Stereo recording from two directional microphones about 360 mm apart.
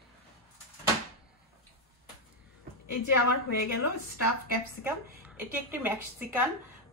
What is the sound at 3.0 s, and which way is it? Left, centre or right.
Speech, left.